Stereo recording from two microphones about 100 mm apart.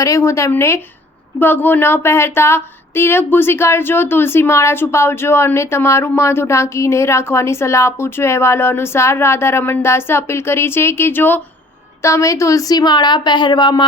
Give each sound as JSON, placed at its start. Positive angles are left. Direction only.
{"t": 0.0, "sound": "speech", "side_deg": 30}
{"t": 12.0, "sound": "a woman's voice", "side_deg": 30}